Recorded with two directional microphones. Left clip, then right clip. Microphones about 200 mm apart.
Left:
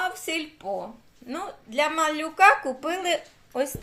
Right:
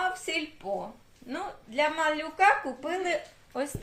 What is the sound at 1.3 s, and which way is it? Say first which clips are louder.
A woman's voice: left 2 dB; 30° left (ahead or behind).